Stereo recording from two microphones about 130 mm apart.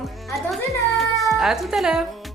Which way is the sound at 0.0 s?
Centre (ahead or behind).